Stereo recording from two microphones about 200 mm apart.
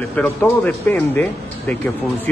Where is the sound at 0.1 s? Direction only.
10° left (ahead or behind).